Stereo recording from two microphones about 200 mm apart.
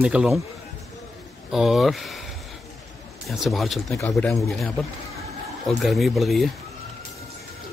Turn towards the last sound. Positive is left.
turn(degrees=0)  # may be behind; listen again after turning